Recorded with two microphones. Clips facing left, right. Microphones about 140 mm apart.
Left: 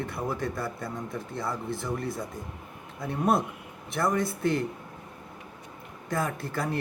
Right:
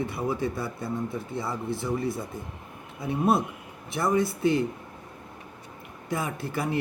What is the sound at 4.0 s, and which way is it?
Speech, 5° right (ahead or behind).